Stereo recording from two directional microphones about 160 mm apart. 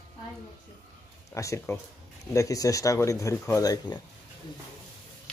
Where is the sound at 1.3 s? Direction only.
20° left (ahead or behind).